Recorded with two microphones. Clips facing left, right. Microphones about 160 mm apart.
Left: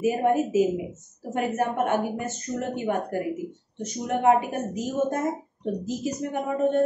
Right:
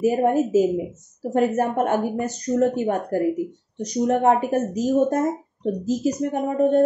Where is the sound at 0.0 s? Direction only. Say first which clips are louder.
Right 3 dB; 40° right (ahead or behind).